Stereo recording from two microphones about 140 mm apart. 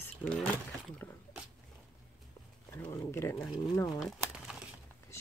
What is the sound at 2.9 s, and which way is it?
Speech, 20° left (ahead or behind).